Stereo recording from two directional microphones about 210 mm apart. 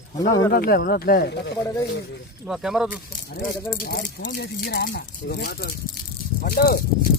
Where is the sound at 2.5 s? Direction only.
Centre (ahead or behind).